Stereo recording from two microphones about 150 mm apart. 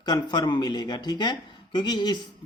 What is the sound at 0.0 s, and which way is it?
Speech, 30° left (ahead or behind).